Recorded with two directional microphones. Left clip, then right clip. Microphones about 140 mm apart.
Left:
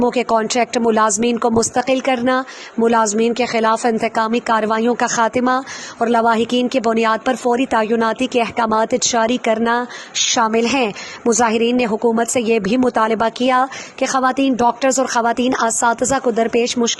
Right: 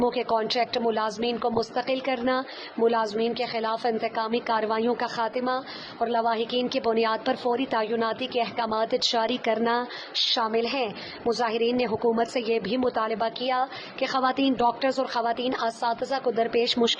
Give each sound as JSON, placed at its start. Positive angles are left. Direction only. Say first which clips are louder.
{"t": 0.0, "sound": "a woman's voice", "louder": "left 8 dB", "side_deg": 35}
{"t": 5.0, "sound": "a woman's voice", "louder": "left 11 dB", "side_deg": 45}